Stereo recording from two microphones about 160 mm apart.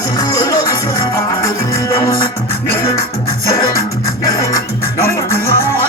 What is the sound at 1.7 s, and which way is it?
Music, 15° left (ahead or behind).